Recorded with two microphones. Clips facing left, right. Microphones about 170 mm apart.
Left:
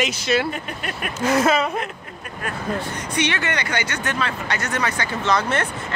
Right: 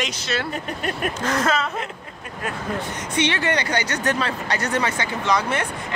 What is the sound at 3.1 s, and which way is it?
Speech, 30° right (ahead or behind).